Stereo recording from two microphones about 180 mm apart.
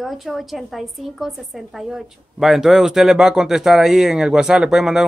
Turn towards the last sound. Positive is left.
turn(degrees=-5)  # may be behind; listen again after turning